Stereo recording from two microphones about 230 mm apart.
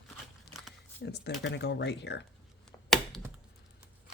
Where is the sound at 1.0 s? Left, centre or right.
Left.